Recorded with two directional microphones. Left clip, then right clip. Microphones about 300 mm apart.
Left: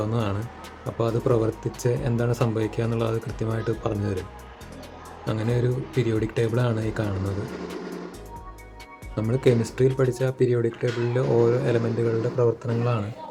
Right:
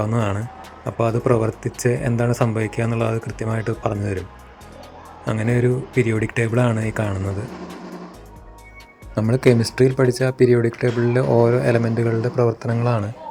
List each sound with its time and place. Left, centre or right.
0.0 s speech: centre
5.2 s speech: centre
9.1 s speech: centre